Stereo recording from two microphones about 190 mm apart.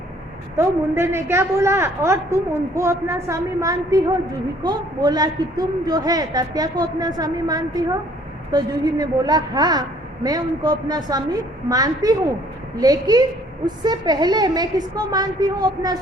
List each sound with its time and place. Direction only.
0.5 s a woman's voice: 15° right (ahead or behind)